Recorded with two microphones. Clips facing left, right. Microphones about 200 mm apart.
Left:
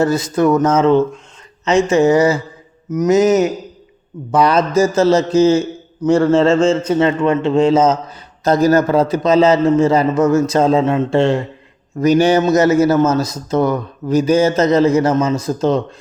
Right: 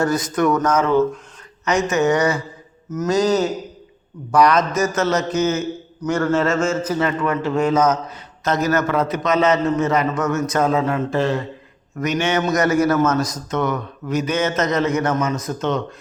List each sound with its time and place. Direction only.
0.0 s a man's voice: 25° left (ahead or behind)